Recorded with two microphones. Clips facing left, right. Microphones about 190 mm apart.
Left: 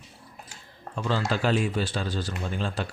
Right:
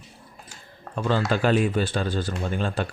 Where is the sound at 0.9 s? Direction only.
55° right (ahead or behind).